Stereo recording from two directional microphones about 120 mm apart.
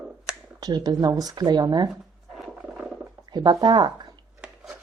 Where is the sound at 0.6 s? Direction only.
35° right (ahead or behind).